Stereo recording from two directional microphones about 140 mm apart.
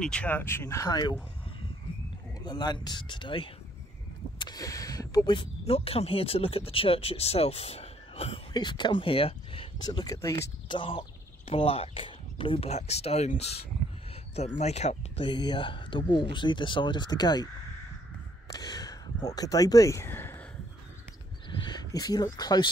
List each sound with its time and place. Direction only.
0.0 s speech: 10° left (ahead or behind); by 1.1 s 30° left (ahead or behind)
2.4 s speech: 30° left (ahead or behind)
8.5 s speech: 35° left (ahead or behind)
10.7 s speech: 40° left (ahead or behind)
15.2 s speech: 35° left (ahead or behind)
18.5 s speech: 30° left (ahead or behind)
21.5 s speech: 30° left (ahead or behind)